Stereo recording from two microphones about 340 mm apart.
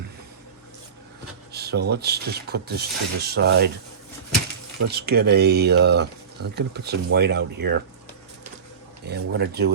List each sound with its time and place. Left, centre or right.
1.5 s speech: right
4.9 s speech: right
9.0 s speech: right